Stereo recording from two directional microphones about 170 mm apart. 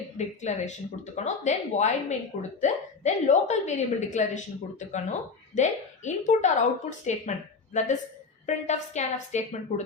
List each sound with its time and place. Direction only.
0.2 s a woman's voice: 45° left (ahead or behind)